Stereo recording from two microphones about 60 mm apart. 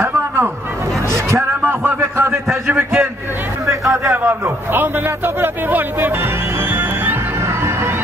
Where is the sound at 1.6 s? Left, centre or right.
Right.